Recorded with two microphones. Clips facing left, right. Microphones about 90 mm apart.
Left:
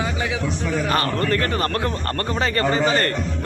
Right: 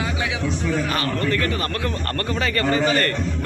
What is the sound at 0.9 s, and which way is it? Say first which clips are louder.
A man's voice: left 2 dB; 40° left (ahead or behind).